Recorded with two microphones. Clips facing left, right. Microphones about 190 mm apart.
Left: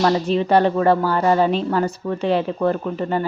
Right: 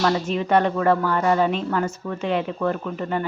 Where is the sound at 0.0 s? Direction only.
30° left (ahead or behind).